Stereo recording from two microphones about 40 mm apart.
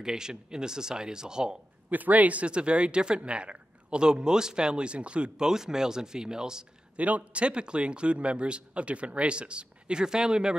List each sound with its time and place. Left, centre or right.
0.0 s speech: centre
1.9 s speech: right
5.5 s speech: centre
7.0 s speech: right; by 10.5 s centre